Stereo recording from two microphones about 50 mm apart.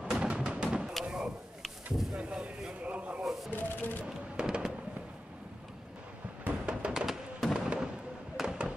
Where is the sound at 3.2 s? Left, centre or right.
Centre.